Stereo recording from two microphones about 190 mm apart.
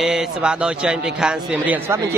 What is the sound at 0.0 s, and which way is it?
A man's voice, 5° right (ahead or behind).